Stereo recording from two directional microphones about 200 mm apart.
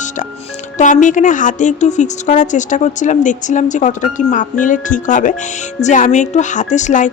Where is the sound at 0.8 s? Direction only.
40° left (ahead or behind).